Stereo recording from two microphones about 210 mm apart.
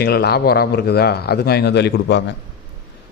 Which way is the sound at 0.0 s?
50° left (ahead or behind).